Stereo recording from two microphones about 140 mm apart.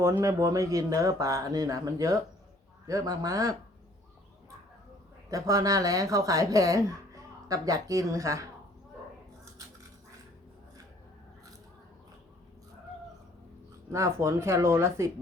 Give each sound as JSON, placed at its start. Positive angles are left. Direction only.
{"t": 0.0, "sound": "speech", "side_deg": -20}
{"t": 5.3, "sound": "speech", "side_deg": -25}
{"t": 13.9, "sound": "speech", "side_deg": -20}